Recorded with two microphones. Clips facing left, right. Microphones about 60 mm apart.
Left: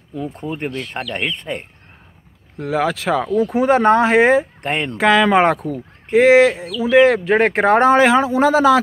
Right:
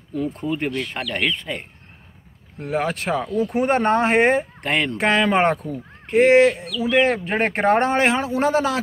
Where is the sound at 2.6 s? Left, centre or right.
Left.